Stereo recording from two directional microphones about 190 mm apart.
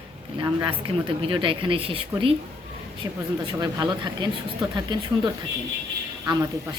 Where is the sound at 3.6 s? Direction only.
20° right (ahead or behind).